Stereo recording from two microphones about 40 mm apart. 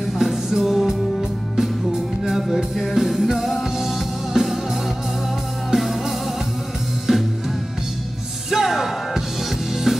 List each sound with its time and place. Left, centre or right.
0.2 s music: centre
2.4 s music: centre
5.7 s music: centre
8.5 s music: centre